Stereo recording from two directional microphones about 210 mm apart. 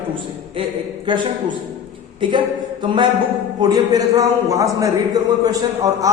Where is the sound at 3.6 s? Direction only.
20° right (ahead or behind).